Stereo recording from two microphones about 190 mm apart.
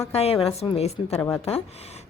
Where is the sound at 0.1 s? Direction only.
30° left (ahead or behind).